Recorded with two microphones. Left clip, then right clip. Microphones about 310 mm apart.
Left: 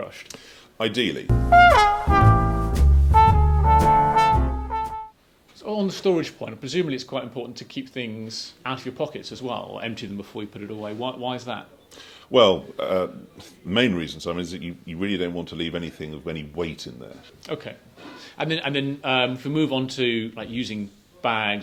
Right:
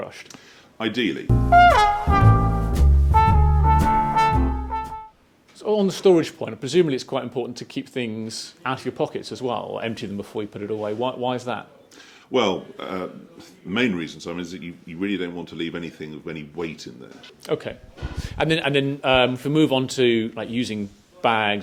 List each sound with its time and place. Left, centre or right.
0.8 s speech: left
1.5 s brass instrument: centre
5.6 s speech: centre
12.3 s speech: left
17.4 s speech: centre